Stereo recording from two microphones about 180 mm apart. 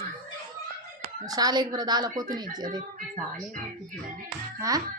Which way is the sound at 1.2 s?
20° right (ahead or behind).